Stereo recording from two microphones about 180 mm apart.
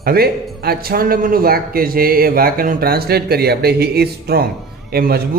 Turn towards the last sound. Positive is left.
turn(degrees=-60)  # may be behind; listen again after turning